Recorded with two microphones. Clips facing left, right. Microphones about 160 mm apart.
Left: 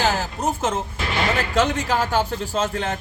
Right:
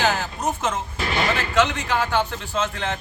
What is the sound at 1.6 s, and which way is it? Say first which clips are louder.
Speech: even; 35° left (ahead or behind).